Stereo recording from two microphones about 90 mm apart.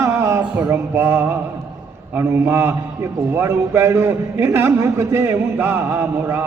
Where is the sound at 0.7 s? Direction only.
25° right (ahead or behind).